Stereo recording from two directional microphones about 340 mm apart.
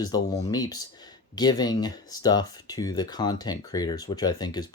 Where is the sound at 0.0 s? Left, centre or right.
Centre.